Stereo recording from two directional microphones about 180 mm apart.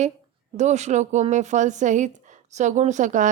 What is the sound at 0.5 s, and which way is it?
A woman's voice, 40° right (ahead or behind).